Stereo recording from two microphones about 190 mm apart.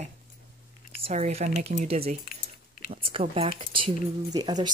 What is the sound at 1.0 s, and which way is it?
Speech, 35° right (ahead or behind).